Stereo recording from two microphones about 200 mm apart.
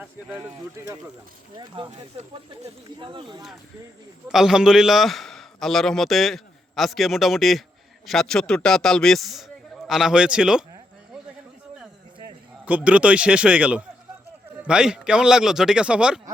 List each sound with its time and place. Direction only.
1.5 s speech: 25° right (ahead or behind)
1.9 s speech: 35° right (ahead or behind)
3.0 s speech: 25° right (ahead or behind)
4.3 s a man's voice: centre (ahead or behind)
12.6 s a man's voice: 5° right (ahead or behind)